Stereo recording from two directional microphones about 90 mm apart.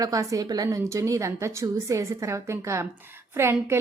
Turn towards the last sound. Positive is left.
turn(degrees=-30)  # may be behind; listen again after turning